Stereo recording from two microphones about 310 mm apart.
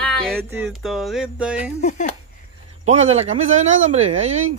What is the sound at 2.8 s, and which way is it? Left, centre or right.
Speech, right.